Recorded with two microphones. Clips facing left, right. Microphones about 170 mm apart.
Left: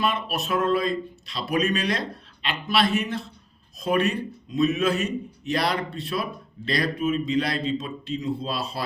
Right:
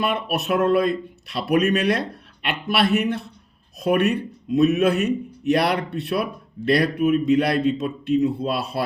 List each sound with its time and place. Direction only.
0.0 s speech: 60° right (ahead or behind)